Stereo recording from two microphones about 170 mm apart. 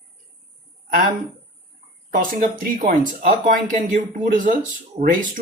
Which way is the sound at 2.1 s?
55° right (ahead or behind).